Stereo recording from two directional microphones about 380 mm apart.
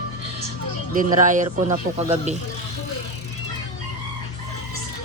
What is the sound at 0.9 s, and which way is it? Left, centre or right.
Speech, right.